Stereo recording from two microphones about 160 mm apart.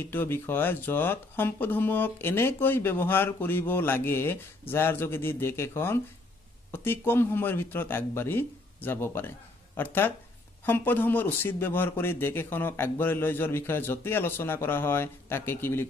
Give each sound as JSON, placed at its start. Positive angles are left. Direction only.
{"t": 0.0, "sound": "speech", "side_deg": 10}